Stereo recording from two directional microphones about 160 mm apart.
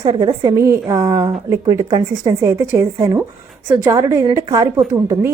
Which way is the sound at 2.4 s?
20° right (ahead or behind).